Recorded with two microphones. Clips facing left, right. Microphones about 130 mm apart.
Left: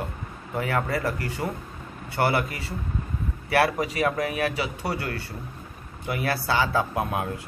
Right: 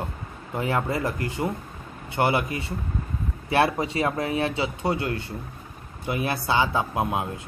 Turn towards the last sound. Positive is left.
turn(degrees=-20)  # may be behind; listen again after turning